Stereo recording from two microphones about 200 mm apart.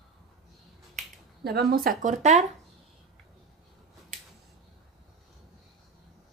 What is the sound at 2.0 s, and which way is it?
Speech, 35° right (ahead or behind).